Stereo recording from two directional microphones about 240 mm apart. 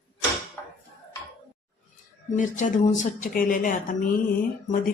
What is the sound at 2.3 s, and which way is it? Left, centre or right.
Speech, left.